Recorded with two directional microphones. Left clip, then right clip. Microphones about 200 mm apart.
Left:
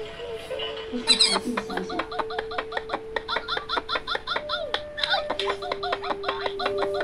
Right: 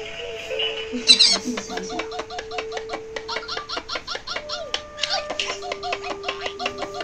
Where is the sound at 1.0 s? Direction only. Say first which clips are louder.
Right 5 dB; 15° left (ahead or behind).